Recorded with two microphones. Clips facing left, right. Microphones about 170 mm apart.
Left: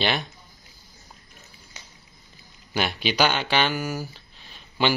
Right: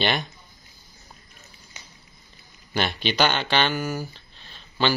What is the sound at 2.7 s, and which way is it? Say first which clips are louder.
Speech: even; 5° left (ahead or behind).